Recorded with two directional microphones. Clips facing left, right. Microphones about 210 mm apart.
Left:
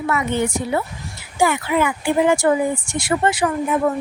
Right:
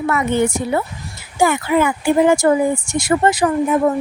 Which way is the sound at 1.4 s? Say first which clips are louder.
Right 3 dB; 45° right (ahead or behind).